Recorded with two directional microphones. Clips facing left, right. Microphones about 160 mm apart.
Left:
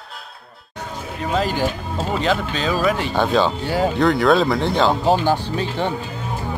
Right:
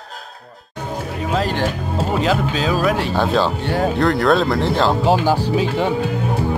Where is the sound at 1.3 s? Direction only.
Centre (ahead or behind).